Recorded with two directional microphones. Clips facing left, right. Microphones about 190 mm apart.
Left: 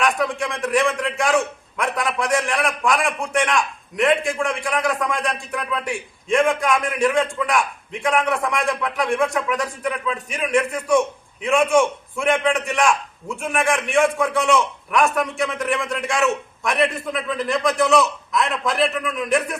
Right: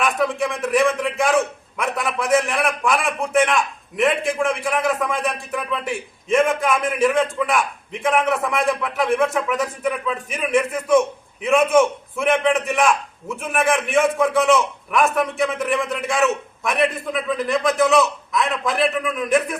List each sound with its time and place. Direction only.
0.0 s a man's voice: centre (ahead or behind)